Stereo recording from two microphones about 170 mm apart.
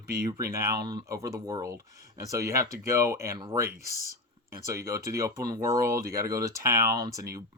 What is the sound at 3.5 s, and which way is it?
Speech, 60° right (ahead or behind).